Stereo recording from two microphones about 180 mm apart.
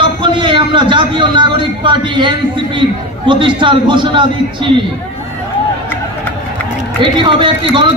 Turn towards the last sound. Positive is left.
turn(degrees=-25)  # may be behind; listen again after turning